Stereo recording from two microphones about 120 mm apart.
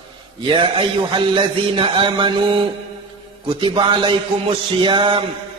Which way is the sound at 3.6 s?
40° right (ahead or behind).